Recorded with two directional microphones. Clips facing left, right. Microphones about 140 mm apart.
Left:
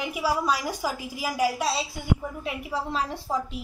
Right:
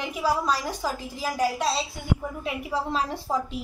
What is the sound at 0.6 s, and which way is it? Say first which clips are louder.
Speech: even; 20° right (ahead or behind).